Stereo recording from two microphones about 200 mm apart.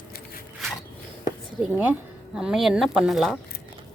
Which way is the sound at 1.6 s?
10° right (ahead or behind).